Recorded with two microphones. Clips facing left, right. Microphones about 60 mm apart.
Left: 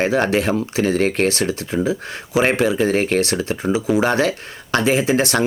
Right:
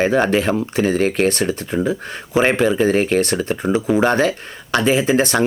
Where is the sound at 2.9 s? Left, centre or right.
Left.